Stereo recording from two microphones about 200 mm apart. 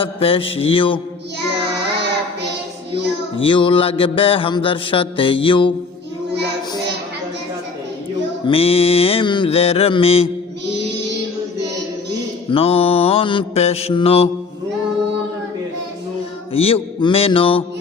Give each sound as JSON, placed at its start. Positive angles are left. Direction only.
{"t": 0.0, "sound": "mantra", "side_deg": 25}
{"t": 3.4, "sound": "mantra", "side_deg": 25}
{"t": 8.4, "sound": "mantra", "side_deg": 30}
{"t": 12.5, "sound": "mantra", "side_deg": 30}
{"t": 16.5, "sound": "mantra", "side_deg": 30}